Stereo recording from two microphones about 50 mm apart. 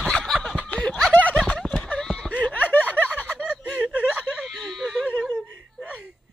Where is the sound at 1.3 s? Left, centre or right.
Centre.